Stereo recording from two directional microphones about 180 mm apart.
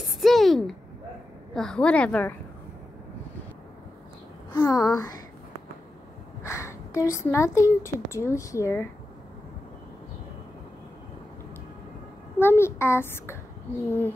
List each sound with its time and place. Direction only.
0.2 s a sound: centre (ahead or behind)
1.5 s a woman's voice: 5° left (ahead or behind)
4.5 s a child's voice: 20° left (ahead or behind)
6.4 s a woman's voice: 15° left (ahead or behind)
12.4 s a woman's voice: 15° left (ahead or behind)